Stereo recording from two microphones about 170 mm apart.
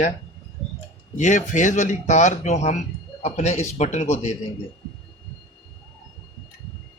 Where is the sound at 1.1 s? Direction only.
45° left (ahead or behind).